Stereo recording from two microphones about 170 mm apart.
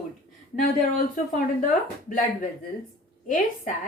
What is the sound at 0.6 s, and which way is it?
A woman's voice, 50° left (ahead or behind).